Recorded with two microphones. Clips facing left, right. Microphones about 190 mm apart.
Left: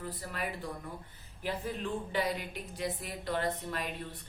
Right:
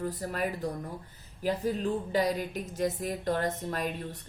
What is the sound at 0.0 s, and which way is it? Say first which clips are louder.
A woman's voice: right 7 dB; 45° right (ahead or behind).